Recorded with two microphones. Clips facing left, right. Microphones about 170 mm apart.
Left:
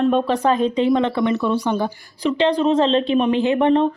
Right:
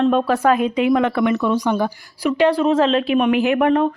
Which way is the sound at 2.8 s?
30° left (ahead or behind).